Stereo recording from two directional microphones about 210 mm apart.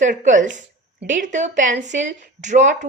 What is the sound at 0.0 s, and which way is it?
A woman's voice, 35° right (ahead or behind).